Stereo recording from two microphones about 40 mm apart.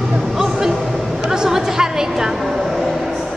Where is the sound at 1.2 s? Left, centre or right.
Centre.